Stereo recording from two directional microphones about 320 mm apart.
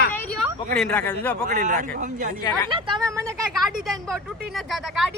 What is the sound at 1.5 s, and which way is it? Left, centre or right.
A man's voice, right.